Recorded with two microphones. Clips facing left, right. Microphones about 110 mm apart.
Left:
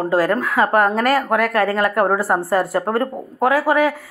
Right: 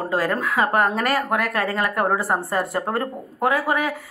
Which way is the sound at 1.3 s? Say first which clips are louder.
Left 6 dB; 50° left (ahead or behind).